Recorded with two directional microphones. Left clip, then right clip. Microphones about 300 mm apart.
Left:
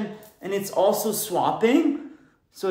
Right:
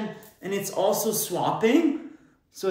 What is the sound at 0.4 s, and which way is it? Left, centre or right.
Speech, centre.